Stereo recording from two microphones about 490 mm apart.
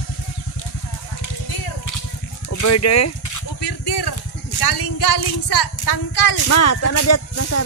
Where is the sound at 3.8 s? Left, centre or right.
Left.